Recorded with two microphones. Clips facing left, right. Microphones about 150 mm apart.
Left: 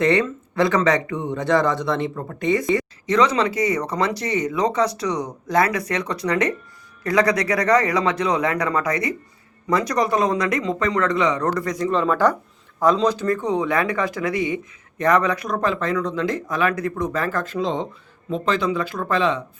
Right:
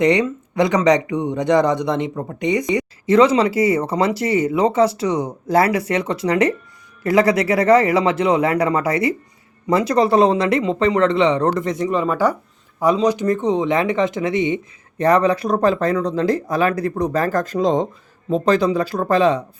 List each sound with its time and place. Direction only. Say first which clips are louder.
0.0 s a man's voice: right 3 dB; 15° right (ahead or behind)
3.1 s speech: right 5 dB; 30° right (ahead or behind)
11.9 s a man's voice: left 1 dB; 10° right (ahead or behind); by 19.4 s 40° right (ahead or behind)